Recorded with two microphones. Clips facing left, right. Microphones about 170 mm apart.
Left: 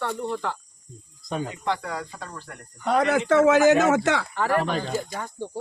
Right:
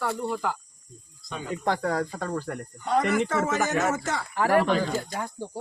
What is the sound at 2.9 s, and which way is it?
Speech, 70° left (ahead or behind).